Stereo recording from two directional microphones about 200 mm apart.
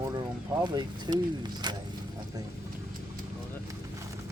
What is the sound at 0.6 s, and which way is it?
Speech, 20° right (ahead or behind).